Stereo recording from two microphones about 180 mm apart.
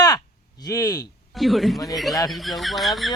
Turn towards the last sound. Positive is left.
turn(degrees=0)  # may be behind; listen again after turning